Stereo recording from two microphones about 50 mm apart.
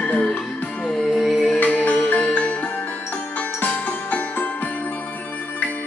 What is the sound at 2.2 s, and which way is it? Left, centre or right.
Music, left.